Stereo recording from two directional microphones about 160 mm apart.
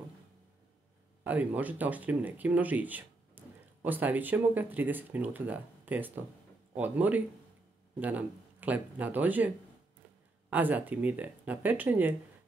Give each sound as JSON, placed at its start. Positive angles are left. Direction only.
{"t": 1.2, "sound": "speech", "side_deg": -10}
{"t": 10.5, "sound": "speech", "side_deg": -10}